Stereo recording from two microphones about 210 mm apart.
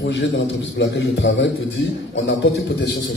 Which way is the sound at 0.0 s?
60° left (ahead or behind).